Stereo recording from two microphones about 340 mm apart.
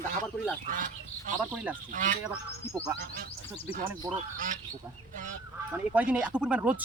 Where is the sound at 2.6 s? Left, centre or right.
Centre.